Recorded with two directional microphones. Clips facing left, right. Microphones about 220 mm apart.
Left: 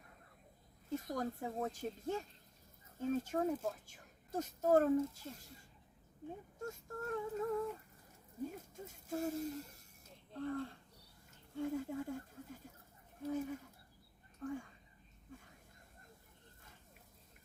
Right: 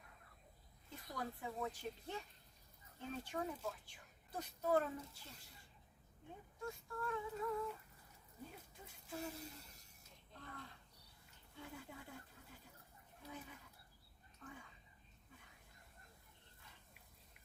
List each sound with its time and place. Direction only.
0.9 s speech: 45° left (ahead or behind)
10.3 s speech: 40° left (ahead or behind)
15.3 s a sound: 45° left (ahead or behind)